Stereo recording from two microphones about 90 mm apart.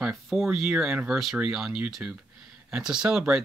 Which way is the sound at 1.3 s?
5° right (ahead or behind).